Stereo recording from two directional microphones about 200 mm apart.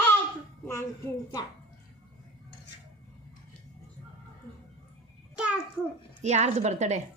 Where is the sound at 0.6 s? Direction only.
15° left (ahead or behind).